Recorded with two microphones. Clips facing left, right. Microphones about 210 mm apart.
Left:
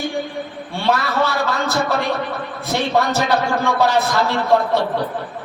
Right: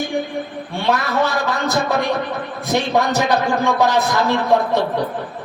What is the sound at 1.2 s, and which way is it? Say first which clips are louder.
A man's voice: even; 15° right (ahead or behind).